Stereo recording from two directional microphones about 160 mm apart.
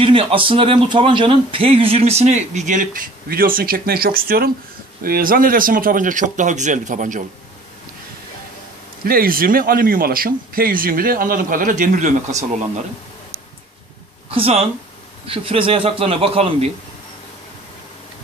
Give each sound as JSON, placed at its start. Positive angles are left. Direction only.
{"t": 0.0, "sound": "a man's voice", "side_deg": -35}
{"t": 9.0, "sound": "speech", "side_deg": -65}
{"t": 14.3, "sound": "a man's voice", "side_deg": -35}